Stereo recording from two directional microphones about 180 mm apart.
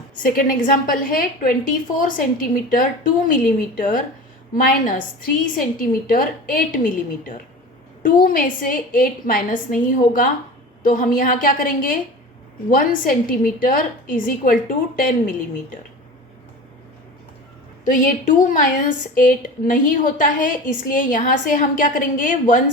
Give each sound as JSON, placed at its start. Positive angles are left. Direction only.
{"t": 0.2, "sound": "a woman's voice", "side_deg": 50}
{"t": 17.8, "sound": "a woman's voice", "side_deg": 45}